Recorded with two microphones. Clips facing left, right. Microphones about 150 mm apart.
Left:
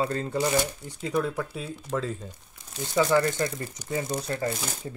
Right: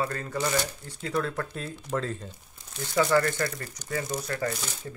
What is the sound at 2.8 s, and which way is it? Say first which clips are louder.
Speech: left 1 dB; 15° left (ahead or behind).